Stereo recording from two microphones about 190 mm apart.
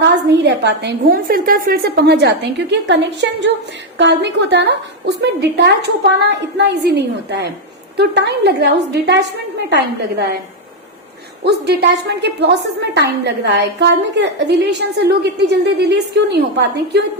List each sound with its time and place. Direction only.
0.0 s a woman's voice: 70° right (ahead or behind)
11.4 s a woman's voice: 60° right (ahead or behind)